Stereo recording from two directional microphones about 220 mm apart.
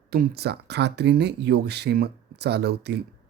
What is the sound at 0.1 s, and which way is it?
Speech, 45° right (ahead or behind).